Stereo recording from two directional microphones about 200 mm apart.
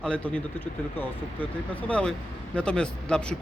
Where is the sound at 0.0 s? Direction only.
5° left (ahead or behind).